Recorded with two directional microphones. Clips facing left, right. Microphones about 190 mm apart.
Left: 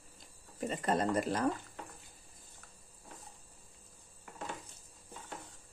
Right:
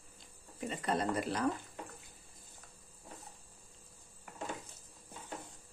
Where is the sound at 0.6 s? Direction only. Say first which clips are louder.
Left 3 dB; 45° left (ahead or behind).